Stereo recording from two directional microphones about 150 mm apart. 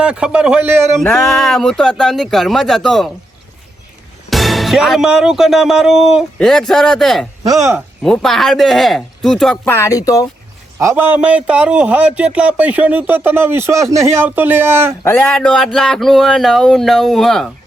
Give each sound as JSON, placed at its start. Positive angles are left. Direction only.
{"t": 0.0, "sound": "speech", "side_deg": -5}
{"t": 0.9, "sound": "speech", "side_deg": 5}
{"t": 4.3, "sound": "speech", "side_deg": 0}
{"t": 9.6, "sound": "speech", "side_deg": 20}
{"t": 10.8, "sound": "speech", "side_deg": -15}
{"t": 15.1, "sound": "speech", "side_deg": 5}